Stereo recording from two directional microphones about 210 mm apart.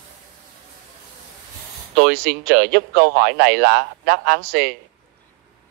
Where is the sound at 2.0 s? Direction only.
55° right (ahead or behind).